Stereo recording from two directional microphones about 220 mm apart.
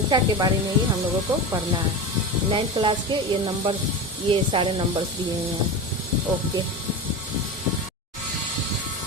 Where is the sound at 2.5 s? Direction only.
25° right (ahead or behind).